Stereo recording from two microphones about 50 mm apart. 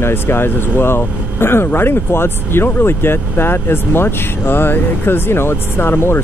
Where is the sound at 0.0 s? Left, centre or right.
Left.